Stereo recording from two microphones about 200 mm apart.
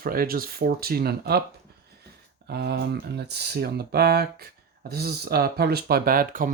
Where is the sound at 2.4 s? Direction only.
55° right (ahead or behind).